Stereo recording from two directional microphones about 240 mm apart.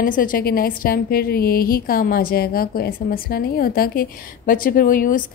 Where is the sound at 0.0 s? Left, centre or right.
Left.